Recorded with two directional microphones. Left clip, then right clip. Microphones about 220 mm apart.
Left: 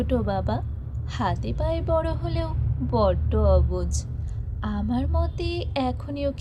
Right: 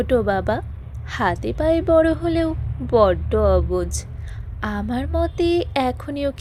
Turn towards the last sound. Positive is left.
turn(degrees=-25)  # may be behind; listen again after turning